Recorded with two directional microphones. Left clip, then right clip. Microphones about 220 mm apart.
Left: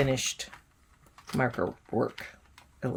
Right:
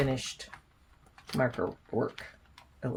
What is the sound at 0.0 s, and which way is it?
Speech, 50° left (ahead or behind).